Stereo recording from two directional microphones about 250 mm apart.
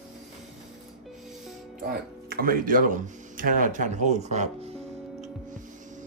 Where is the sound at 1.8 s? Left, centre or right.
Right.